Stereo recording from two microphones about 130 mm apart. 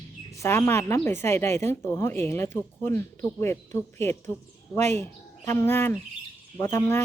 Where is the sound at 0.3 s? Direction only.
20° left (ahead or behind).